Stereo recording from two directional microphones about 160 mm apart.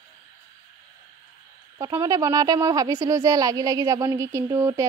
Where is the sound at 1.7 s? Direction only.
20° right (ahead or behind).